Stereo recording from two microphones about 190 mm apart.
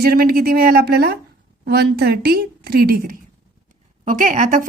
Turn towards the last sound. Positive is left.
turn(degrees=-45)  # may be behind; listen again after turning